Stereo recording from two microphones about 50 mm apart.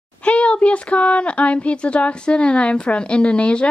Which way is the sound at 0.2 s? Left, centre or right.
Left.